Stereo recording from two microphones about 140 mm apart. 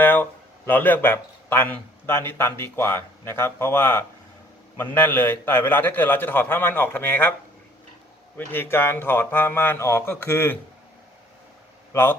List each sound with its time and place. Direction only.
0.0 s a man's voice: 15° left (ahead or behind)
8.4 s a man's voice: 15° left (ahead or behind)